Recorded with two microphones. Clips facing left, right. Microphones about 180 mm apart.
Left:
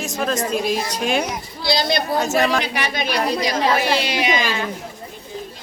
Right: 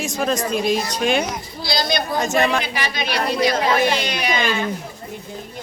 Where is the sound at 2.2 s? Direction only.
5° left (ahead or behind).